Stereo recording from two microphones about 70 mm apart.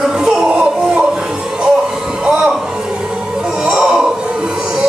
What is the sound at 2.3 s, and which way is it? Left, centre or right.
Music, centre.